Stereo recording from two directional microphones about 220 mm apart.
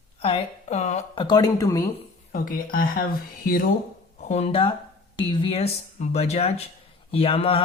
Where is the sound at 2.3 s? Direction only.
40° left (ahead or behind).